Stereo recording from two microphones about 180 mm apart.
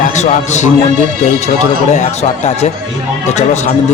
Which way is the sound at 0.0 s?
40° left (ahead or behind).